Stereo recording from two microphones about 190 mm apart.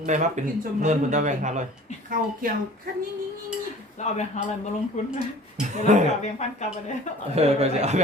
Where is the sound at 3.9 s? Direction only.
35° left (ahead or behind).